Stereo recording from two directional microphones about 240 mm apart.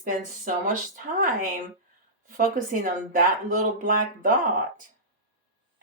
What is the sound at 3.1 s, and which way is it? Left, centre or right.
Speech, right.